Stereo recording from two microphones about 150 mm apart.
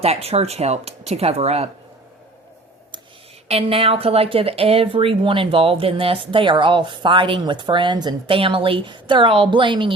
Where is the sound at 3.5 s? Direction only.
40° right (ahead or behind).